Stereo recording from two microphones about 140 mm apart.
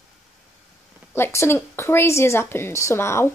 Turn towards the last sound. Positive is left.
turn(degrees=20)  # may be behind; listen again after turning